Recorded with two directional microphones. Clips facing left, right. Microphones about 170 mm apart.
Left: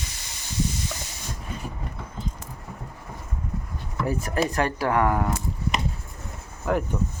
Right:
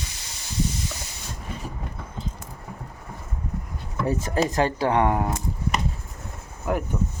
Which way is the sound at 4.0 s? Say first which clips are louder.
Right 2 dB; 25° right (ahead or behind).